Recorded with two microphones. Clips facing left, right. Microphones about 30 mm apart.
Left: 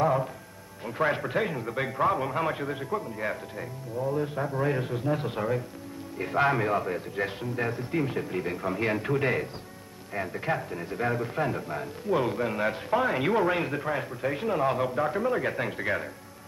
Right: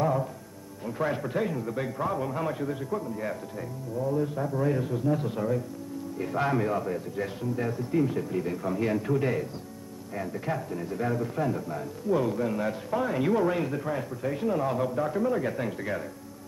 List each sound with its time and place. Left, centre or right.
0.0 s music: left
0.8 s a man's voice: left